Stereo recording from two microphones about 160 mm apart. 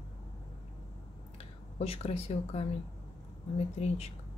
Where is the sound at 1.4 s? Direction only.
40° left (ahead or behind).